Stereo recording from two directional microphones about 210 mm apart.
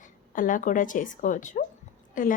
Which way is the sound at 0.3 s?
40° left (ahead or behind).